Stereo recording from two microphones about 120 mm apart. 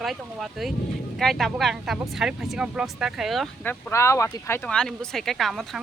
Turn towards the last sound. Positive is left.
turn(degrees=0)  # may be behind; listen again after turning